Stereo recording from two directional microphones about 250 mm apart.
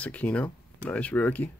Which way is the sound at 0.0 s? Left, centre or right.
Centre.